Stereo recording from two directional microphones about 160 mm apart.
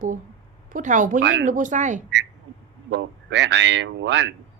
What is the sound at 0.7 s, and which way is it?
Speech, 50° right (ahead or behind).